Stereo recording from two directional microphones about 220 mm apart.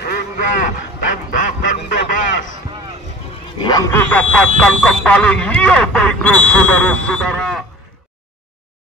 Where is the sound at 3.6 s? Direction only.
15° left (ahead or behind).